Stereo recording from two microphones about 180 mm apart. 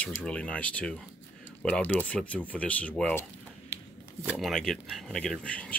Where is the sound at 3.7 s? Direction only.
10° right (ahead or behind).